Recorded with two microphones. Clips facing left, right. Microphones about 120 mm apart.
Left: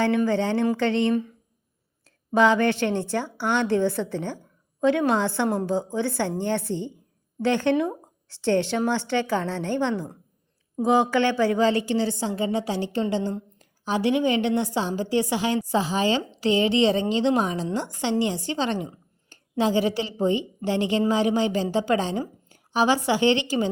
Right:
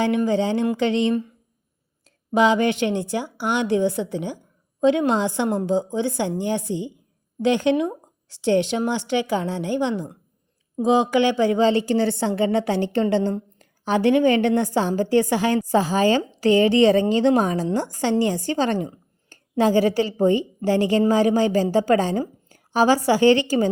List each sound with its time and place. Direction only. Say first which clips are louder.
0.3 s speech: right 2 dB; 15° right (ahead or behind)
11.9 s a woman's voice: right 4 dB; 55° right (ahead or behind); by 23.6 s 40° right (ahead or behind)